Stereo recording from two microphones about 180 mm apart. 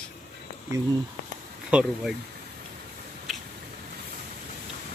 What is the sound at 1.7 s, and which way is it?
Speech, 5° right (ahead or behind).